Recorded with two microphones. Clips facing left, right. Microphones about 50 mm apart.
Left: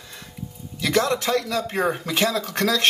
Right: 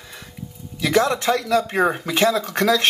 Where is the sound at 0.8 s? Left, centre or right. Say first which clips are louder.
Right 3 dB; centre.